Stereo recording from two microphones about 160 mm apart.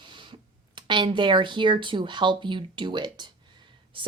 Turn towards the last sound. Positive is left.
turn(degrees=-35)  # may be behind; listen again after turning